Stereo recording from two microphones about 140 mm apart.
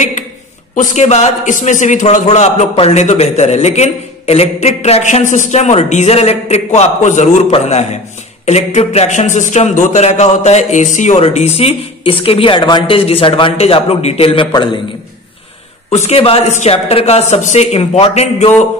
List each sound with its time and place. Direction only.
0.7 s a man's voice: 60° left (ahead or behind)
2.7 s speech: 45° left (ahead or behind)
15.9 s speech: 50° left (ahead or behind)